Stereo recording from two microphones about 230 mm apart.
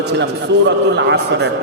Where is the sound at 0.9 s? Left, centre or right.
Right.